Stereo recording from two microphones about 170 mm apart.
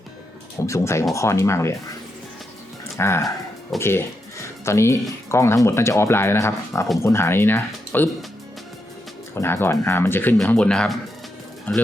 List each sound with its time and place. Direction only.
0.7 s speech: 15° left (ahead or behind)
3.0 s speech: 15° left (ahead or behind)
9.3 s speech: 15° left (ahead or behind)